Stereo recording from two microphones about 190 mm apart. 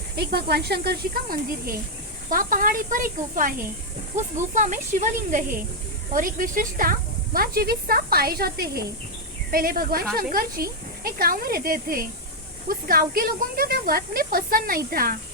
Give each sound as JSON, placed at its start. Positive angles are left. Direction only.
{"t": 0.2, "sound": "speech", "side_deg": -55}